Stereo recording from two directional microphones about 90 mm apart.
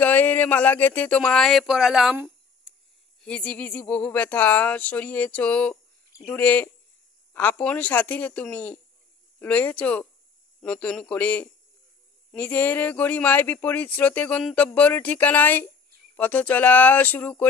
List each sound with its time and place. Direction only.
0.0 s speech: 20° left (ahead or behind)
1.2 s speech: 5° left (ahead or behind)
2.7 s a sound: 5° right (ahead or behind)
3.2 s speech: 10° left (ahead or behind)